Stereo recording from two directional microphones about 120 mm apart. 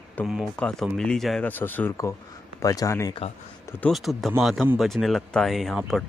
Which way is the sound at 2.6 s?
30° left (ahead or behind).